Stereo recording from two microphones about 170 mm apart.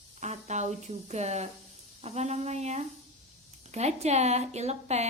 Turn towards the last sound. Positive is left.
turn(degrees=-40)  # may be behind; listen again after turning